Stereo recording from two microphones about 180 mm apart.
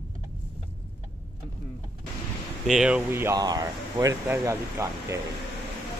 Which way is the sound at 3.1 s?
15° right (ahead or behind).